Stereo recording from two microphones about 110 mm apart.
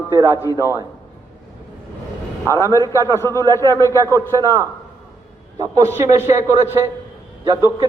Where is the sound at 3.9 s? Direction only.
30° right (ahead or behind).